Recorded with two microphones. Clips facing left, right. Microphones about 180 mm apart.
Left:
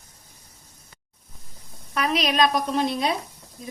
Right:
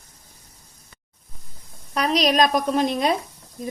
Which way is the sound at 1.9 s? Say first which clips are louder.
Right 4 dB; 35° right (ahead or behind).